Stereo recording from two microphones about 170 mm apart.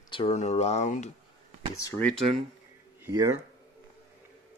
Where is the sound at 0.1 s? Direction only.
35° left (ahead or behind).